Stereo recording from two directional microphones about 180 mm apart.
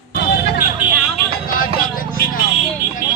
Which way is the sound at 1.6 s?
50° left (ahead or behind).